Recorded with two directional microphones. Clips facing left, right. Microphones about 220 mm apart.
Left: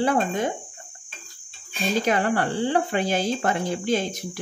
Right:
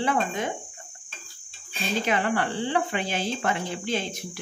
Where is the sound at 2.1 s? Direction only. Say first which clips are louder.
Left 2 dB; 40° left (ahead or behind).